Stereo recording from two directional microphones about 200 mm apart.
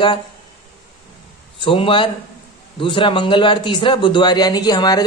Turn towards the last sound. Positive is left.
turn(degrees=20)  # may be behind; listen again after turning